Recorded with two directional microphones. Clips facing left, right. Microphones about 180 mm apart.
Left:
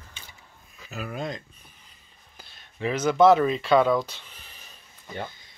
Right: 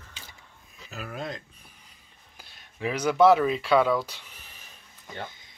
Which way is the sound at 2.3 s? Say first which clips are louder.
Left 2 dB; 10° right (ahead or behind).